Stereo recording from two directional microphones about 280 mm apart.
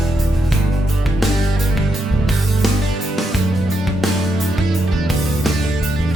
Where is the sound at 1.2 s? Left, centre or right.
Centre.